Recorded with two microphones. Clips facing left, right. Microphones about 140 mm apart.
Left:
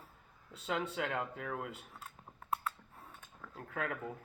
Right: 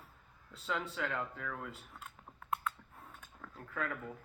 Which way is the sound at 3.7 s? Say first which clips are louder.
Left 1 dB; 90° left.